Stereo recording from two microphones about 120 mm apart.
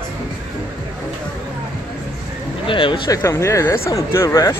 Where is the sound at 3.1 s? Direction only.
25° left (ahead or behind).